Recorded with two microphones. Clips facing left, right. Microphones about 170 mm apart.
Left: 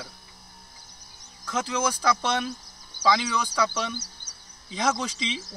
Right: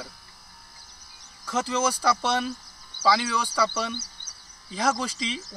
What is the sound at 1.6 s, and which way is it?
Speech, 15° left (ahead or behind).